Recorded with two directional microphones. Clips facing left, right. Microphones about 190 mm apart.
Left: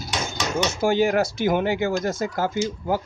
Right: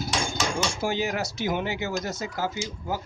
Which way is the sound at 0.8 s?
55° left (ahead or behind).